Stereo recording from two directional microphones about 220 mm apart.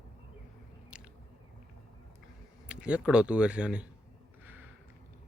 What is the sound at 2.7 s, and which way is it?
Speech, 5° right (ahead or behind).